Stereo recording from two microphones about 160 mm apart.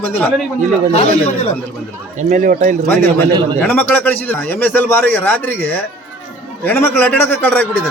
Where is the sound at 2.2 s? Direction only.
50° right (ahead or behind).